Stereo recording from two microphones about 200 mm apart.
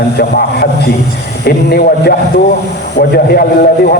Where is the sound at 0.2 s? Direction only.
50° left (ahead or behind).